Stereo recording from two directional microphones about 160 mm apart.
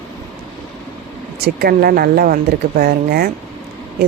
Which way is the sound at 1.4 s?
75° right (ahead or behind).